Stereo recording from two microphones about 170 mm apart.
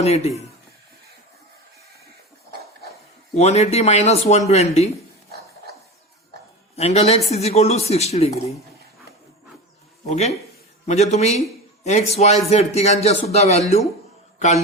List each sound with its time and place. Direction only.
0.0 s speech: 40° left (ahead or behind)
3.3 s speech: 40° left (ahead or behind)
6.7 s speech: 40° left (ahead or behind)
10.1 s a man's voice: 40° left (ahead or behind)